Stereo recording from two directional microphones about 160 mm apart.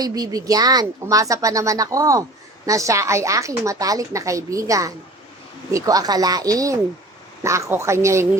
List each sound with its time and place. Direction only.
0.0 s a woman's voice: 25° right (ahead or behind)